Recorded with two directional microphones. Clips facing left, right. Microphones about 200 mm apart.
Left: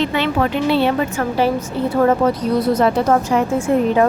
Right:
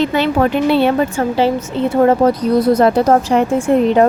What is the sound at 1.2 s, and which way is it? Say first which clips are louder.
Speech: right 3 dB; 25° right (ahead or behind).